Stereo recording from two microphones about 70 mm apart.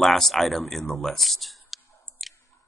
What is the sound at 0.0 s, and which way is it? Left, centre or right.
Speech, centre.